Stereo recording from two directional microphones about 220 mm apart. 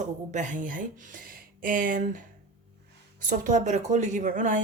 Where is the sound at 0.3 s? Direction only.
35° right (ahead or behind).